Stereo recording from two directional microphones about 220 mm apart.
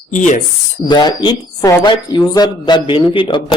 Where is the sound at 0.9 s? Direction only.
20° left (ahead or behind).